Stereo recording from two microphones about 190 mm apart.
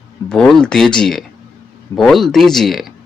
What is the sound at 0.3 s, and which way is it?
Speech, 5° left (ahead or behind).